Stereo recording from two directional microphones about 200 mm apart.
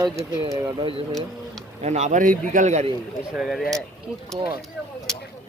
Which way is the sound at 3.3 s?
Centre (ahead or behind).